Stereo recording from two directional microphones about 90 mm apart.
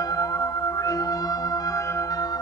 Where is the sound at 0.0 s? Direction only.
40° left (ahead or behind).